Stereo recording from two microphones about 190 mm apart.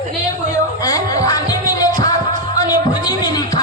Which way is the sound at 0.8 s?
20° left (ahead or behind).